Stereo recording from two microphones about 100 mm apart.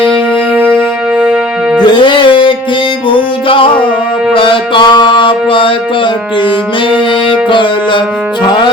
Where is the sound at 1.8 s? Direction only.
50° left (ahead or behind).